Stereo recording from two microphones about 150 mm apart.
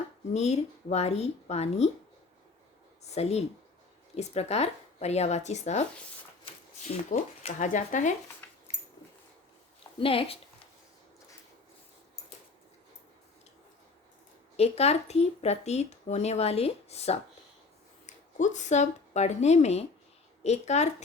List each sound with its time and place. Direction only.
0.3 s speech: 45° left (ahead or behind)
3.2 s speech: 45° left (ahead or behind)
6.8 s speech: 50° left (ahead or behind)
8.4 s a sound: 15° left (ahead or behind)
10.0 s speech: 40° left (ahead or behind)
14.5 s speech: 45° left (ahead or behind)